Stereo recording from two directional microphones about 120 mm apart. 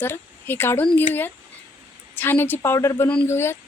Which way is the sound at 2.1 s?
15° left (ahead or behind).